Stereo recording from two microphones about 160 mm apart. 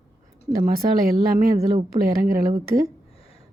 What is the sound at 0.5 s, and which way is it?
Speech, 65° right (ahead or behind).